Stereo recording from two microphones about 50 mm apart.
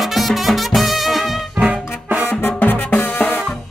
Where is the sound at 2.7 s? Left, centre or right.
Left.